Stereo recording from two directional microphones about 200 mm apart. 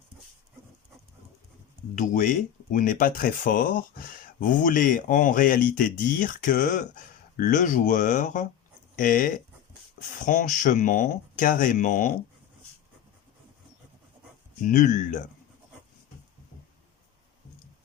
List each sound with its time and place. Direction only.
2.0 s speech: 40° left (ahead or behind)
14.6 s speech: 40° left (ahead or behind)